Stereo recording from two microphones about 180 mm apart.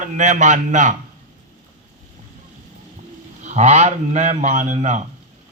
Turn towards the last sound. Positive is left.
turn(degrees=-40)  # may be behind; listen again after turning